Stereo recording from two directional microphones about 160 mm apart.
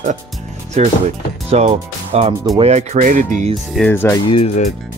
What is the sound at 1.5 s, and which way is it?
Speech, 40° right (ahead or behind).